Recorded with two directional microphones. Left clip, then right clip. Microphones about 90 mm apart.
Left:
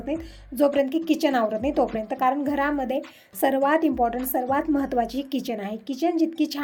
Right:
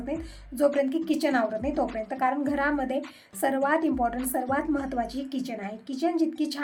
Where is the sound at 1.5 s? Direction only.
35° left (ahead or behind).